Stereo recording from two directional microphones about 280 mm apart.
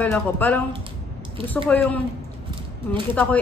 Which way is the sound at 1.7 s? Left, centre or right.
Centre.